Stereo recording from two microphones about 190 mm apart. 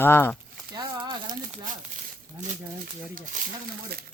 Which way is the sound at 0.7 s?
25° right (ahead or behind).